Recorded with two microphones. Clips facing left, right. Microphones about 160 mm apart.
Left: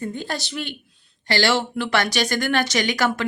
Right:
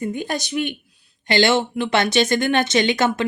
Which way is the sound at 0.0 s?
15° right (ahead or behind).